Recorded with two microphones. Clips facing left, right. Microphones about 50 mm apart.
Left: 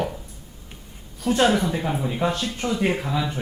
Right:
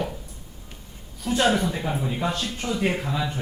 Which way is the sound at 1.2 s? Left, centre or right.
Left.